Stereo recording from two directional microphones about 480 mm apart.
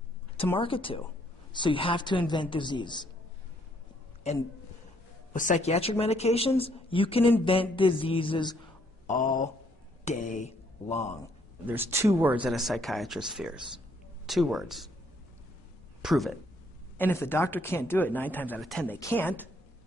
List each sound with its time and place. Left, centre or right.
0.4 s speech: centre
5.3 s speech: centre
10.0 s mantra: centre
11.6 s speech: centre
16.0 s speech: centre